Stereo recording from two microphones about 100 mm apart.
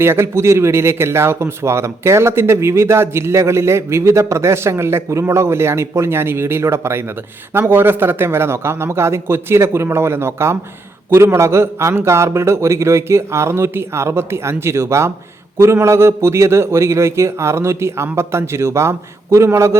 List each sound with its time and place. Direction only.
0.0 s speech: 25° right (ahead or behind)